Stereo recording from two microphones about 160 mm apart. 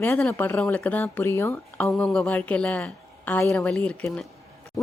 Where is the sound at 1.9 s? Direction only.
5° left (ahead or behind).